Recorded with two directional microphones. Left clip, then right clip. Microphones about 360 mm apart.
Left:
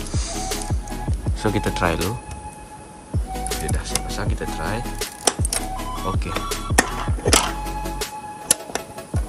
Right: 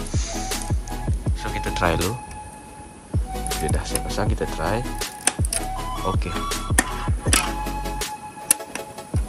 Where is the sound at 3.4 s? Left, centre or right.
Centre.